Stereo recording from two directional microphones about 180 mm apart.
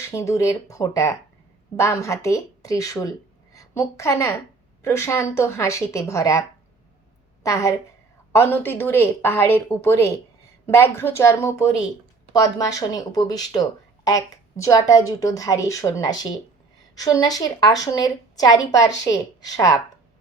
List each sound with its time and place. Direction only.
0.1 s a woman's voice: 15° left (ahead or behind)
7.4 s a woman's voice: 15° left (ahead or behind)